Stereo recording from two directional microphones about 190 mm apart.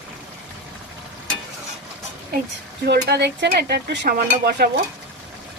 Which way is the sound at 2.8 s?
60° right (ahead or behind).